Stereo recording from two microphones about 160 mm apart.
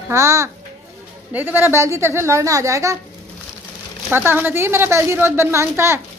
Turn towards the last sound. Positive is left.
turn(degrees=-15)  # may be behind; listen again after turning